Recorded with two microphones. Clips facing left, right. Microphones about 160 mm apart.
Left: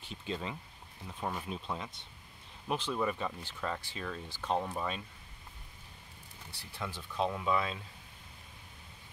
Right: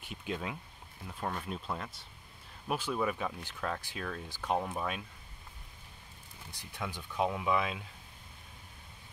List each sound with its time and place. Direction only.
0.0 s speech: 10° right (ahead or behind)
1.0 s speech: 5° left (ahead or behind)
6.5 s speech: 15° right (ahead or behind)